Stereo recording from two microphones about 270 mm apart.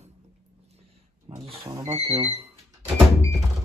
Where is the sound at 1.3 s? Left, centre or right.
Centre.